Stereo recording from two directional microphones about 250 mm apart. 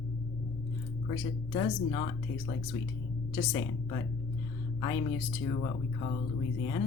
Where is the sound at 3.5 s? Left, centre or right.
Centre.